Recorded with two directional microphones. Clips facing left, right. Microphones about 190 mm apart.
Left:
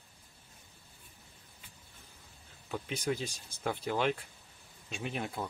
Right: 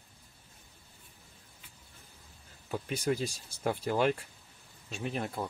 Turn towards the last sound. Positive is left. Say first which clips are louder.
# right 2 dB
turn(degrees=0)  # may be behind; listen again after turning